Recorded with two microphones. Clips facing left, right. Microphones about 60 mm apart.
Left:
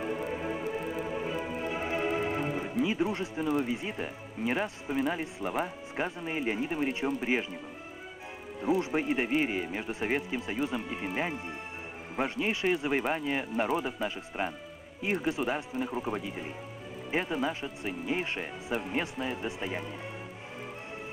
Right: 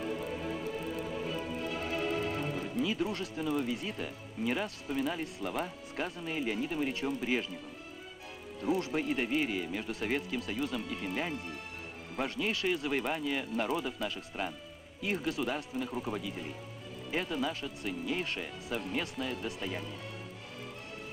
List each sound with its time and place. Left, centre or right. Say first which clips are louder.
0.0 s music: left 3 dB; left
2.8 s speech: left 4 dB; left
8.5 s speech: left 3 dB; left